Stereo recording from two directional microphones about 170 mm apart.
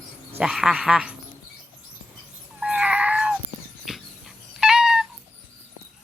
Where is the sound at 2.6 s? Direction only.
5° right (ahead or behind).